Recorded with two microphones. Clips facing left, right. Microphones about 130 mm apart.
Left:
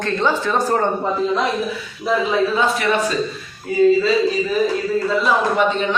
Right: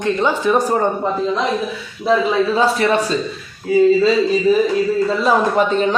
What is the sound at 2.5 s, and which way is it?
Speech, 35° right (ahead or behind).